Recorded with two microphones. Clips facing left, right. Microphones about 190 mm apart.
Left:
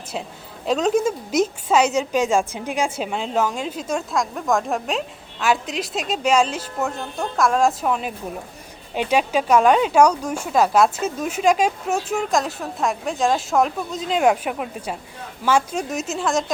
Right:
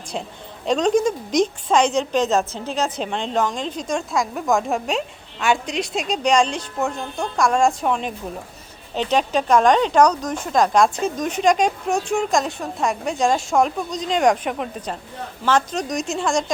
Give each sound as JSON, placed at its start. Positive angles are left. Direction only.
{"t": 0.6, "sound": "a woman's voice", "side_deg": 5}